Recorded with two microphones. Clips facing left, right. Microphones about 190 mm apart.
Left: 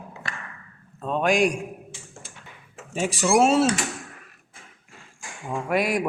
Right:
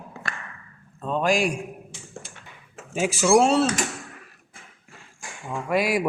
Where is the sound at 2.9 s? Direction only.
Centre (ahead or behind).